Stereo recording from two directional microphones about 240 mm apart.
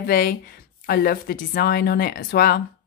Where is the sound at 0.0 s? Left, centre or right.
Left.